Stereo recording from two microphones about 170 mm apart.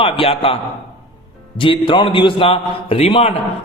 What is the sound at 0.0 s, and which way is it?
A man's voice, 35° left (ahead or behind).